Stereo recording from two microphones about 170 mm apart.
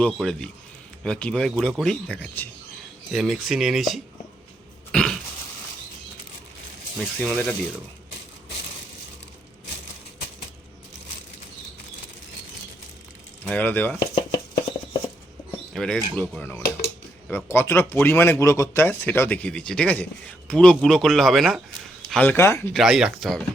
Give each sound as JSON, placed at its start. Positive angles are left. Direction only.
{"t": 0.0, "sound": "speech", "side_deg": 5}
{"t": 4.9, "sound": "cough", "side_deg": 5}
{"t": 7.0, "sound": "speech", "side_deg": 0}
{"t": 13.4, "sound": "speech", "side_deg": 10}
{"t": 14.0, "sound": "speech", "side_deg": 25}
{"t": 15.7, "sound": "speech", "side_deg": 5}
{"t": 22.7, "sound": "speech", "side_deg": 0}